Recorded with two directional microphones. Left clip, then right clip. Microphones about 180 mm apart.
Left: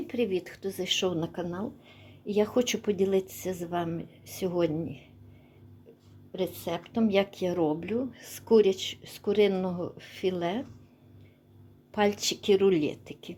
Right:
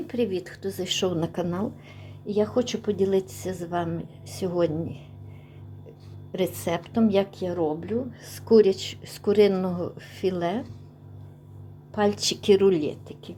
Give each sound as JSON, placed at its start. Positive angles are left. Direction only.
{"t": 0.1, "sound": "a woman's voice", "side_deg": 15}
{"t": 2.2, "sound": "a woman's voice", "side_deg": 20}
{"t": 2.9, "sound": "a woman's voice", "side_deg": 10}
{"t": 6.3, "sound": "speech", "side_deg": -10}
{"t": 7.1, "sound": "a woman's voice", "side_deg": 15}
{"t": 8.2, "sound": "speech", "side_deg": 10}
{"t": 11.9, "sound": "a sound", "side_deg": 20}
{"t": 12.1, "sound": "speech", "side_deg": 5}
{"t": 12.7, "sound": "a woman's voice", "side_deg": 15}